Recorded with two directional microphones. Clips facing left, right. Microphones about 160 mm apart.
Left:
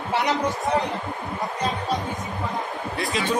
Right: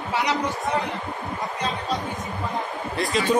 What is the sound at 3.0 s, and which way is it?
Speech, centre (ahead or behind).